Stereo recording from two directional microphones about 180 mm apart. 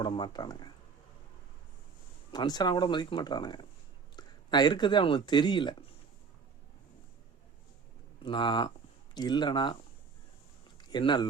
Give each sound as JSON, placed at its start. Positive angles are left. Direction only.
{"t": 0.0, "sound": "speech", "side_deg": 25}
{"t": 2.3, "sound": "speech", "side_deg": 20}
{"t": 8.2, "sound": "speech", "side_deg": 25}
{"t": 10.8, "sound": "speech", "side_deg": 25}